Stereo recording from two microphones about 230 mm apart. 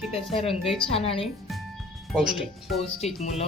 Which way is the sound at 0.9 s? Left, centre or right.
Left.